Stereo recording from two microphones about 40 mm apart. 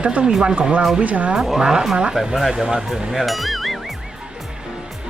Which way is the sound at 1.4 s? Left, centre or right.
Centre.